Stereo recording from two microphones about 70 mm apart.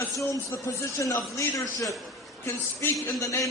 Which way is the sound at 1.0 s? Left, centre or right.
Left.